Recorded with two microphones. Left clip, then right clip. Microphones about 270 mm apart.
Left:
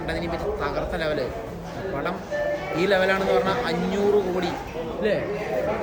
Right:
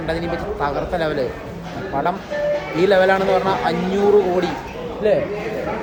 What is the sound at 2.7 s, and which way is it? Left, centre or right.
Speech, centre.